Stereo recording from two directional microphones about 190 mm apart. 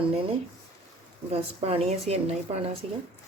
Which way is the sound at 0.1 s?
30° right (ahead or behind).